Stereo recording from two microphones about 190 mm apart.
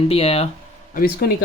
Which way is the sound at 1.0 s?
55° left (ahead or behind).